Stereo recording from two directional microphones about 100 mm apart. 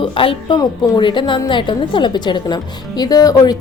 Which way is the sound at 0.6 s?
50° left (ahead or behind).